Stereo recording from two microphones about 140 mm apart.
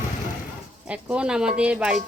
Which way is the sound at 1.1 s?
5° right (ahead or behind).